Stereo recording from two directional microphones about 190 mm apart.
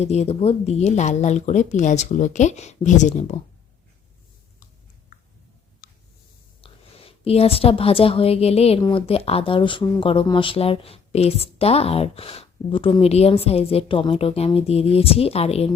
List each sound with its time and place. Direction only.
0.0 s speech: 35° left (ahead or behind)
5.8 s a sound: 50° left (ahead or behind)
6.6 s a woman's voice: 30° left (ahead or behind)